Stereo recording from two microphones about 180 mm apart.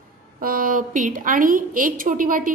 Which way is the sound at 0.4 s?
50° right (ahead or behind).